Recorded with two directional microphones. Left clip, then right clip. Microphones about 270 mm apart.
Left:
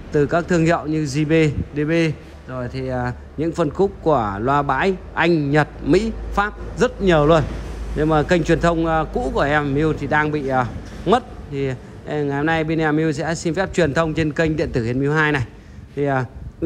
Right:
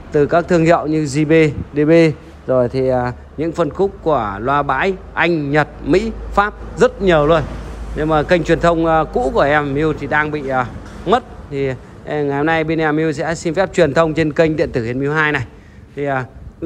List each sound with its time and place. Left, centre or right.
0.1 s a man's voice: centre